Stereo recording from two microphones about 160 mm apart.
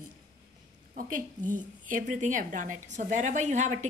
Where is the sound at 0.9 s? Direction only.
55° right (ahead or behind).